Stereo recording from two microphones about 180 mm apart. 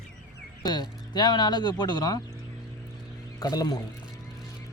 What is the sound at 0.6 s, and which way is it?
Speech, 25° left (ahead or behind).